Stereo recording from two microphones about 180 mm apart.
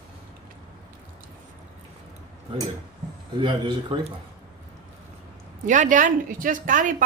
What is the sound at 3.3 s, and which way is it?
Speech, 25° right (ahead or behind).